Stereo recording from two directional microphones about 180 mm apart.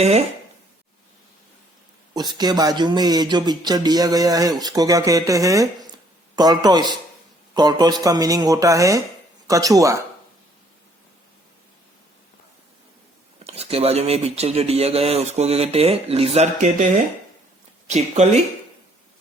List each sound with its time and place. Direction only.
2.1 s speech: 20° right (ahead or behind)
13.4 s speech: 35° right (ahead or behind)
17.8 s speech: 40° right (ahead or behind)